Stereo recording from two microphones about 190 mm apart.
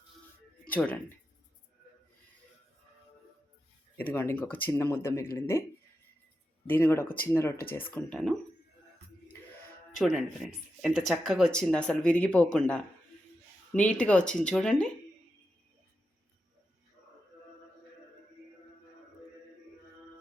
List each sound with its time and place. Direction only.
0.7 s speech: 5° left (ahead or behind)
3.9 s speech: 10° left (ahead or behind)
6.7 s speech: 10° left (ahead or behind)
7.5 s speech: 50° left (ahead or behind)
7.8 s speech: 10° left (ahead or behind)
9.9 s speech: centre (ahead or behind)